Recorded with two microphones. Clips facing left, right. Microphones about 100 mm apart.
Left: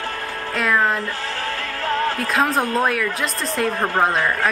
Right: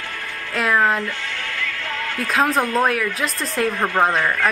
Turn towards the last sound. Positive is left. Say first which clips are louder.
# even
turn(degrees=0)  # may be behind; listen again after turning